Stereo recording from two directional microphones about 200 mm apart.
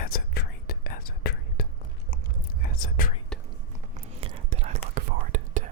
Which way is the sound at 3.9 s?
30° right (ahead or behind).